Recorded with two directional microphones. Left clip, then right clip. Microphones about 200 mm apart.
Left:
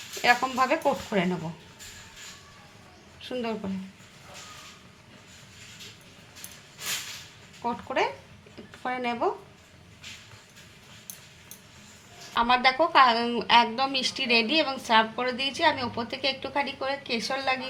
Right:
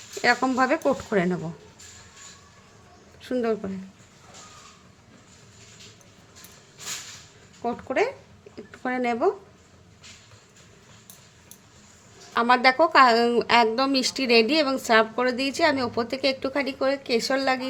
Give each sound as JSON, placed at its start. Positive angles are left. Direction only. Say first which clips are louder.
{"t": 0.2, "sound": "speech", "louder": "right 1 dB", "side_deg": -40}
{"t": 3.2, "sound": "a sound", "louder": "right 6 dB", "side_deg": -45}
{"t": 7.6, "sound": "speech", "louder": "right 2 dB", "side_deg": -40}
{"t": 12.3, "sound": "a woman's voice", "louder": "right 3 dB", "side_deg": -50}